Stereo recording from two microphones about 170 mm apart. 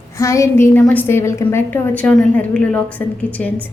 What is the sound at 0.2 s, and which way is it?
A woman's voice, 15° left (ahead or behind).